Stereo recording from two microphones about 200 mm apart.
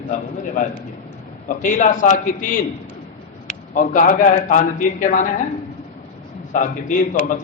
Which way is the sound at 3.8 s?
40° left (ahead or behind).